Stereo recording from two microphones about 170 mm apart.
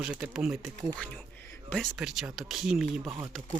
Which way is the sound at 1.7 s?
Centre (ahead or behind).